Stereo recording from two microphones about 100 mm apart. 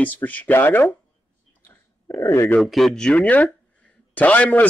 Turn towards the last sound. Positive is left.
turn(degrees=15)  # may be behind; listen again after turning